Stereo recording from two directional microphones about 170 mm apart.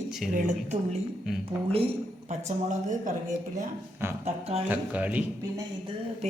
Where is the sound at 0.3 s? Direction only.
45° right (ahead or behind).